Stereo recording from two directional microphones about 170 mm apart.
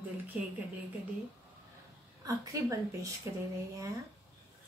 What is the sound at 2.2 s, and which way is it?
Speech, 20° right (ahead or behind).